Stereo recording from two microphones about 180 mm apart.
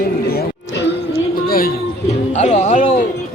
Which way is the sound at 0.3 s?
60° left (ahead or behind).